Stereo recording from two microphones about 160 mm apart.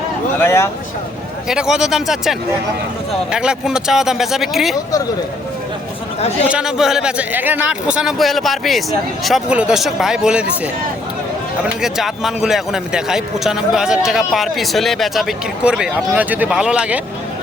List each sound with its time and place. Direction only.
0.3 s speech: 15° left (ahead or behind)
1.5 s a man's voice: 5° right (ahead or behind)
3.3 s a man's voice: 5° right (ahead or behind)
6.5 s a man's voice: 5° right (ahead or behind)
11.6 s a man's voice: 5° right (ahead or behind)